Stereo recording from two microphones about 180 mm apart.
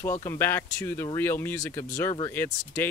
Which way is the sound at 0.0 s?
15° left (ahead or behind).